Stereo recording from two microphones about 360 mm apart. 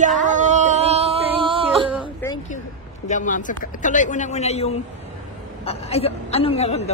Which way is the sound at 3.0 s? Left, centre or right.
Left.